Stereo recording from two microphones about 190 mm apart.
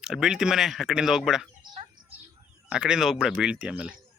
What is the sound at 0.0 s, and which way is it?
Speech, 5° right (ahead or behind).